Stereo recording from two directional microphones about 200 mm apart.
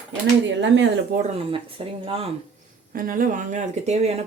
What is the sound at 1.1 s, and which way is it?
Speech, 35° right (ahead or behind).